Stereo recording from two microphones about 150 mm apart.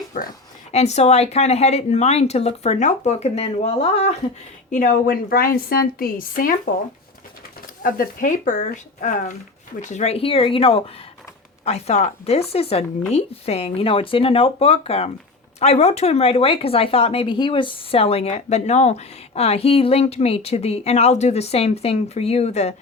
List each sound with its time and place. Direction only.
0.1 s a woman's voice: 65° left (ahead or behind)
0.7 s speech: 45° left (ahead or behind)
4.7 s a woman's voice: 60° left (ahead or behind)
7.8 s speech: 65° left (ahead or behind); by 22.7 s 45° left (ahead or behind)